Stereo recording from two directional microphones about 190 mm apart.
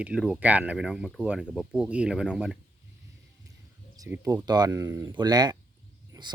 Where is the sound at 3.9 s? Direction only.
15° right (ahead or behind).